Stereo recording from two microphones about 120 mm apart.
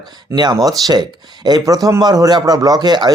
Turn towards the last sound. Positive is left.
turn(degrees=-35)  # may be behind; listen again after turning